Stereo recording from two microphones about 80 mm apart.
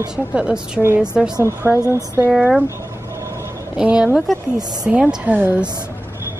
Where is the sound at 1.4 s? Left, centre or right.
Right.